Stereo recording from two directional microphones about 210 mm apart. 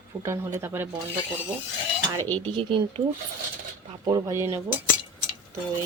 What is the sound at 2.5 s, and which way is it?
Speech, 25° right (ahead or behind).